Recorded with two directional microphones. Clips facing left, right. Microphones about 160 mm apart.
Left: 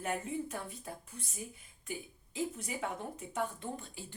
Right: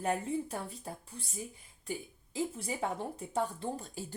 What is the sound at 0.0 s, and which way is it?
Speech, 35° right (ahead or behind).